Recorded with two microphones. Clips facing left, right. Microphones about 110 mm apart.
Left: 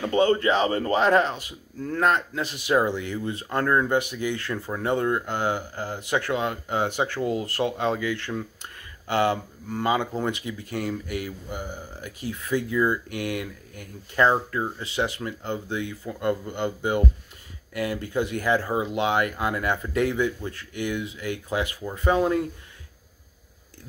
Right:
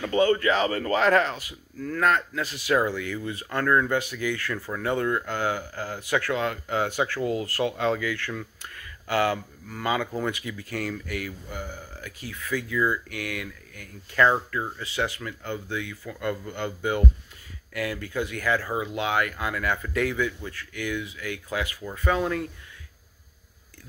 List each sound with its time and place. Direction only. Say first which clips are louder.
0.0 s speech: left 1 dB; 25° left (ahead or behind)